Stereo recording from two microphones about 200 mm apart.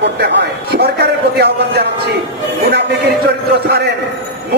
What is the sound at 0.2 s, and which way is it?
A man's voice, 55° right (ahead or behind).